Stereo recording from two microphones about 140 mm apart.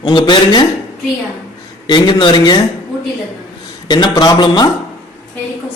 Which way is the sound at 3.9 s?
30° left (ahead or behind).